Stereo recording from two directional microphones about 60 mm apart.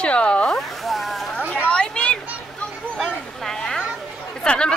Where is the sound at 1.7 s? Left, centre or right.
Centre.